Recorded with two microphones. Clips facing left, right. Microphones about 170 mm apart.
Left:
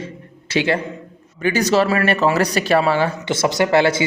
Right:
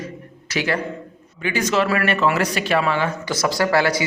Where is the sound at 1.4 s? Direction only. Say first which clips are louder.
Left 4 dB; 40° left (ahead or behind).